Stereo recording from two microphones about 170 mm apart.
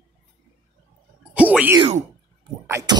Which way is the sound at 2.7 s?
20° right (ahead or behind).